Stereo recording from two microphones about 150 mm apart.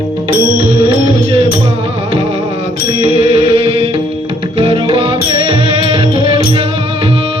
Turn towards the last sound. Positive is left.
turn(degrees=-35)  # may be behind; listen again after turning